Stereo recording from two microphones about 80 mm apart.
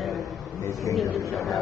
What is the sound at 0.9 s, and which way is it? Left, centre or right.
Speech, left.